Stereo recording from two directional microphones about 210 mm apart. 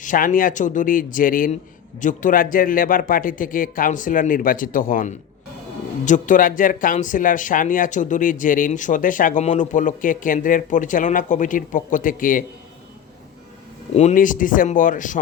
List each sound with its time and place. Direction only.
0.0 s speech: 40° left (ahead or behind)
13.9 s speech: 35° left (ahead or behind)